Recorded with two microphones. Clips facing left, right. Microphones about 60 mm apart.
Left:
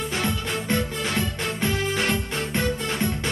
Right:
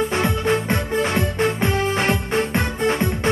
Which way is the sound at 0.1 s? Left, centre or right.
Right.